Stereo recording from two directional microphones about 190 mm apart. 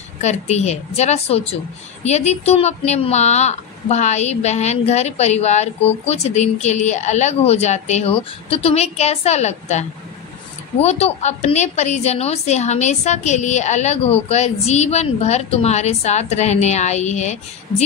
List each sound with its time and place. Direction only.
0.2 s speech: 35° left (ahead or behind)